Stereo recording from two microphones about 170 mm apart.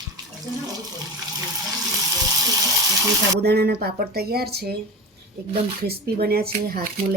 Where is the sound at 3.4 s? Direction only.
65° right (ahead or behind).